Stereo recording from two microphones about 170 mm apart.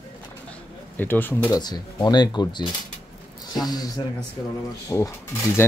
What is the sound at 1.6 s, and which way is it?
Speech, 25° left (ahead or behind).